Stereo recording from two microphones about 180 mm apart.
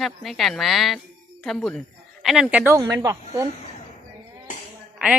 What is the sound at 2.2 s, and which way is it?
Speech, centre (ahead or behind).